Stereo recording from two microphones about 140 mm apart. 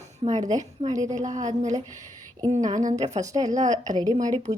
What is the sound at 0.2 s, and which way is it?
Speech, 55° right (ahead or behind).